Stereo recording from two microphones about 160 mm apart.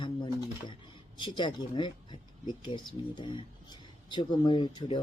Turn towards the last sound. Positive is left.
turn(degrees=30)  # may be behind; listen again after turning